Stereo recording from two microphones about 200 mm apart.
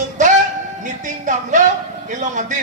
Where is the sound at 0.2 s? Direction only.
40° right (ahead or behind).